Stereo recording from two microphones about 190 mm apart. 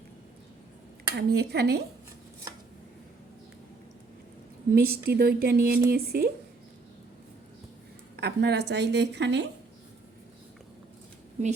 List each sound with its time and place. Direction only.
1.1 s a woman's voice: 55° right (ahead or behind)
4.7 s speech: 55° right (ahead or behind)
8.1 s a woman's voice: 60° right (ahead or behind)